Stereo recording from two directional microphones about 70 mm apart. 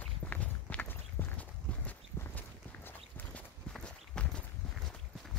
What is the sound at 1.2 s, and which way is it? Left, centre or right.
Walk, left.